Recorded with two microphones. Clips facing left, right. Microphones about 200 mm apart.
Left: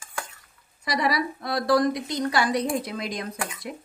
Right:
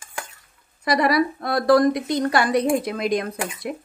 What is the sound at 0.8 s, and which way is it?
A woman's voice, 55° right (ahead or behind).